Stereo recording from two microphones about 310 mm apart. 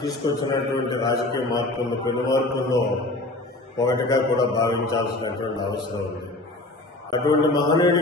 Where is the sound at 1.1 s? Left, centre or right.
Centre.